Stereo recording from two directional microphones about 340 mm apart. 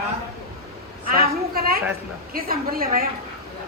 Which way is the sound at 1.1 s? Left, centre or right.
Right.